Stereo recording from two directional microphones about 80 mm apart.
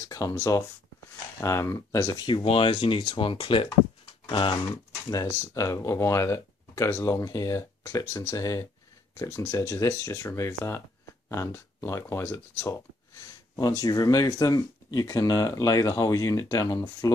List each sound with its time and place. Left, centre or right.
0.0 s speech: left
2.2 s speech: left
4.6 s speech: left
13.6 s speech: left